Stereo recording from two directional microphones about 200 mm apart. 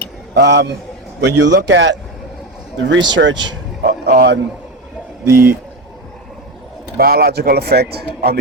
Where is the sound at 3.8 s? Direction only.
50° right (ahead or behind).